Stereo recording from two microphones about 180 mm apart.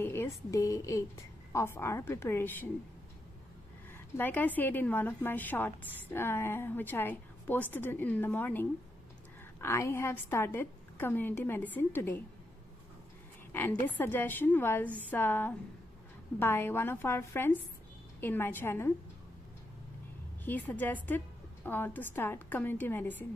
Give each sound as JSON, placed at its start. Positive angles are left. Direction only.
{"t": 0.0, "sound": "a woman's voice", "side_deg": 15}
{"t": 4.2, "sound": "a woman's voice", "side_deg": 10}
{"t": 13.5, "sound": "a sound", "side_deg": 10}
{"t": 13.8, "sound": "a woman's voice", "side_deg": 10}
{"t": 20.4, "sound": "a woman's voice", "side_deg": 10}